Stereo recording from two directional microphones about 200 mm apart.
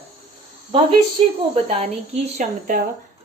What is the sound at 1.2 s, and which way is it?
Speech, 30° right (ahead or behind).